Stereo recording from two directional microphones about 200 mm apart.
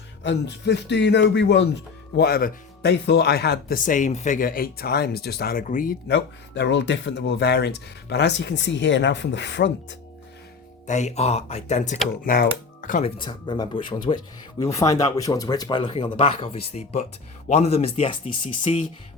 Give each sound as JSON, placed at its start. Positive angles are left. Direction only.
{"t": 0.2, "sound": "speech", "side_deg": 60}
{"t": 6.1, "sound": "speech", "side_deg": 60}
{"t": 10.8, "sound": "speech", "side_deg": 35}
{"t": 13.1, "sound": "speech", "side_deg": 25}